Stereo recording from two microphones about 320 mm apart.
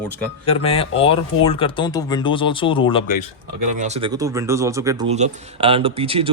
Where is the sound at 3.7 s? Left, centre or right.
Right.